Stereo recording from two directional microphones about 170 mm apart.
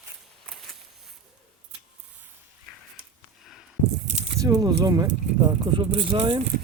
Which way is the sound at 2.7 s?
Centre (ahead or behind).